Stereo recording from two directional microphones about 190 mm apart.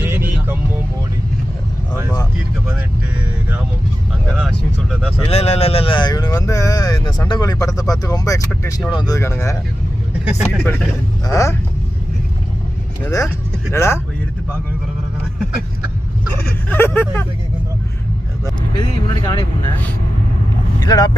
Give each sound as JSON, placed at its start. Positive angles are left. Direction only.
{"t": 0.0, "sound": "music", "side_deg": -10}
{"t": 4.4, "sound": "vehicle", "side_deg": 0}
{"t": 5.3, "sound": "speech", "side_deg": 35}
{"t": 10.2, "sound": "speech", "side_deg": 0}
{"t": 11.3, "sound": "speech", "side_deg": 15}
{"t": 13.0, "sound": "speech", "side_deg": 20}
{"t": 16.6, "sound": "speech", "side_deg": 10}
{"t": 18.8, "sound": "speech", "side_deg": 20}
{"t": 20.7, "sound": "speech", "side_deg": 20}